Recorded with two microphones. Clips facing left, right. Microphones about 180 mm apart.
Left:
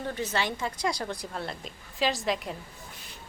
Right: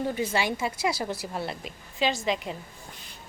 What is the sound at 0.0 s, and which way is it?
A woman's voice, 10° right (ahead or behind).